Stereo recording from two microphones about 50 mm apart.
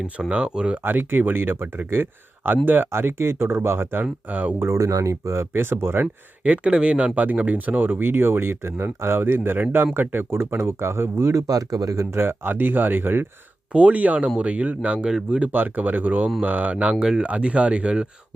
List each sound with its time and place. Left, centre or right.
0.3 s speech: centre
0.9 s speech: right
4.3 s speech: right
4.6 s speech: right
5.5 s speech: right
6.4 s speech: right
10.6 s speech: right
12.5 s speech: right
13.7 s speech: right
15.5 s speech: right
16.9 s speech: centre
17.2 s speech: right